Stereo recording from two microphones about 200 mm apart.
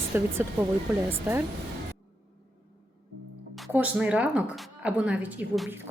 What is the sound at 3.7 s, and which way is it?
A woman's voice, 5° right (ahead or behind).